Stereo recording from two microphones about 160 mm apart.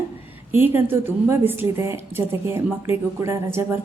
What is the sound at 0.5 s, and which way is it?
A woman's voice, 15° right (ahead or behind).